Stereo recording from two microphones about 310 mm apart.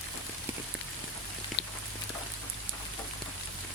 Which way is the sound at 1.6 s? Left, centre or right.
Left.